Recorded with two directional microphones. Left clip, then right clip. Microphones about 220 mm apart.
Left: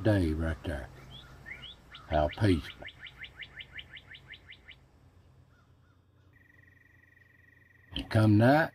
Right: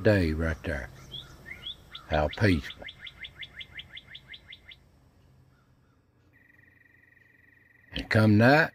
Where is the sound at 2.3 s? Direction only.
25° right (ahead or behind).